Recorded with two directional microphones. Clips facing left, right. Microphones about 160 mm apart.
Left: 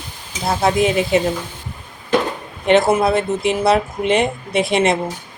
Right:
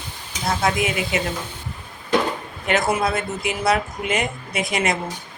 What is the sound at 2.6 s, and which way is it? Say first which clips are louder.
Speech: left 7 dB; 30° left (ahead or behind).